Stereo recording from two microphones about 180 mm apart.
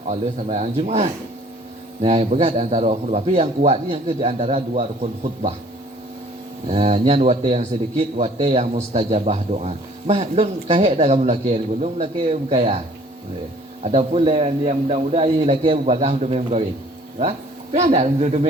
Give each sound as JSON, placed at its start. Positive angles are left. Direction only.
{"t": 0.1, "sound": "a man's voice", "side_deg": -35}
{"t": 6.7, "sound": "a man's voice", "side_deg": -35}
{"t": 13.8, "sound": "a man's voice", "side_deg": -35}